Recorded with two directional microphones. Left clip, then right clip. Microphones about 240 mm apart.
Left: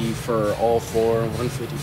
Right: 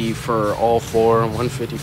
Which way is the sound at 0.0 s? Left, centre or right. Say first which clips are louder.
Right 3 dB; centre.